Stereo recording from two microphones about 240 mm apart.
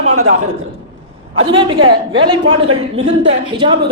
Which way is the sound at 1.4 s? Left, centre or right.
Right.